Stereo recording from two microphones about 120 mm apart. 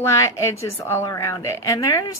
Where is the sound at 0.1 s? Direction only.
25° left (ahead or behind).